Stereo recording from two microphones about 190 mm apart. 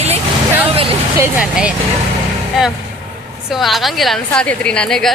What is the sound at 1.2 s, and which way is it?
Speech, 5° right (ahead or behind).